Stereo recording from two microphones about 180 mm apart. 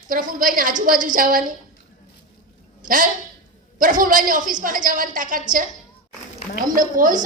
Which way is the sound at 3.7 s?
50° right (ahead or behind).